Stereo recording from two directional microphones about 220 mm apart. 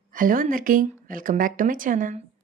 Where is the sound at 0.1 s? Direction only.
40° right (ahead or behind).